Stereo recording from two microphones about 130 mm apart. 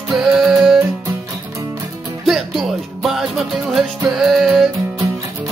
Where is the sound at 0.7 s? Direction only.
20° right (ahead or behind).